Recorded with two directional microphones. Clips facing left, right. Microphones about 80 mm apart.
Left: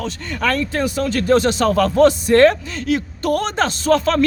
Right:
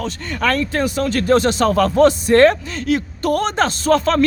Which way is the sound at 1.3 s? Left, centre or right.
Right.